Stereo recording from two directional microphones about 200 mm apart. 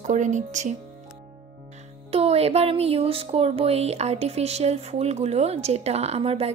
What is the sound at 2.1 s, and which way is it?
A woman's voice, 30° right (ahead or behind).